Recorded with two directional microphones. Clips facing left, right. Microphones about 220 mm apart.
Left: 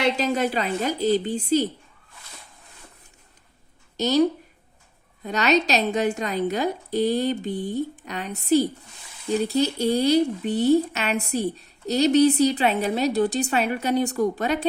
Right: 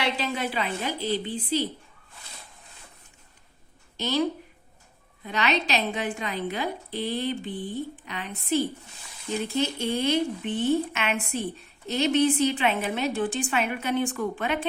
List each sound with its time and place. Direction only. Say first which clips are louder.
0.2 s a woman's voice: left 6 dB; 40° left (ahead or behind)
3.9 s speech: left 6 dB; 40° left (ahead or behind)